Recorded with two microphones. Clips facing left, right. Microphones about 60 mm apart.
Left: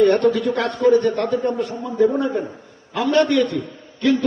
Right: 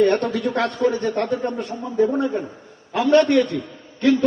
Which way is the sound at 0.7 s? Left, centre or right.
Left.